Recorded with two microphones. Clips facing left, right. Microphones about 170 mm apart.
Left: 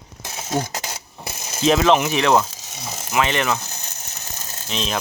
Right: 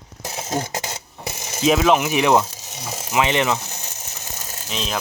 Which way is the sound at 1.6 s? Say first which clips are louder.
Even; 5° right (ahead or behind).